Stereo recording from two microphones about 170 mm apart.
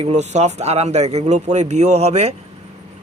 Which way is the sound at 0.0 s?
40° right (ahead or behind).